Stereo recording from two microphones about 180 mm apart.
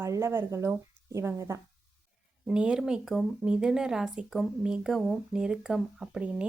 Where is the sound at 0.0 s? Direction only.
15° right (ahead or behind).